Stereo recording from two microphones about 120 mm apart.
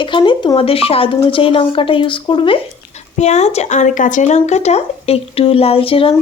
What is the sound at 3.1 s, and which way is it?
A woman's voice, 70° left (ahead or behind).